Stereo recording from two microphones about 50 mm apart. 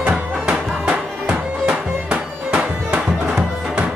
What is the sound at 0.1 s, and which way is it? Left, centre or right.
Music, centre.